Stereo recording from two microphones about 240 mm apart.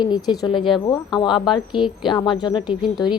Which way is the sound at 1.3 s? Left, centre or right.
Centre.